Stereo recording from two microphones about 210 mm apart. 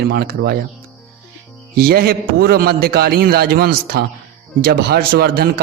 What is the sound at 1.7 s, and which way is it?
A man's voice, 45° right (ahead or behind).